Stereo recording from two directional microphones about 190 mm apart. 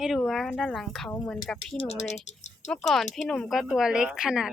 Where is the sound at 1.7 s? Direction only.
30° left (ahead or behind).